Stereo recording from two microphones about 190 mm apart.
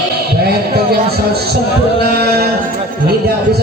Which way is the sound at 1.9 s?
55° right (ahead or behind).